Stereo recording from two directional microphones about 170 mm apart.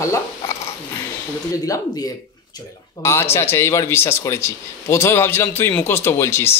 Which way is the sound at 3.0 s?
15° left (ahead or behind).